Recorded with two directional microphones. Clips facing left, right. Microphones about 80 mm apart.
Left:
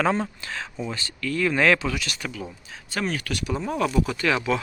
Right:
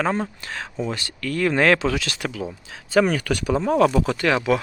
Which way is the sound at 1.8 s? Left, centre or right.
Right.